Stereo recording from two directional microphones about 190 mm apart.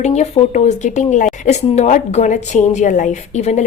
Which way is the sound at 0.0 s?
35° left (ahead or behind).